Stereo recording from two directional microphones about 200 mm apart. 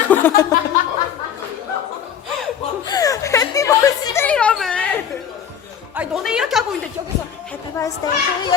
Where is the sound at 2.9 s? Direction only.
15° left (ahead or behind).